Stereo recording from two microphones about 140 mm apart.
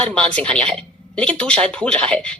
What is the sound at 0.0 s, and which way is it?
Speech, 10° left (ahead or behind).